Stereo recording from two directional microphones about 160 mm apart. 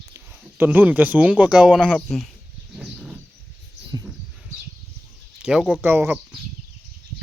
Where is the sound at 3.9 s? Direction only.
25° right (ahead or behind).